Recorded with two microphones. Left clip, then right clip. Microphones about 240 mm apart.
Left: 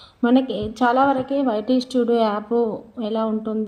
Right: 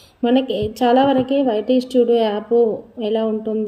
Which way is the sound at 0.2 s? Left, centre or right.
Left.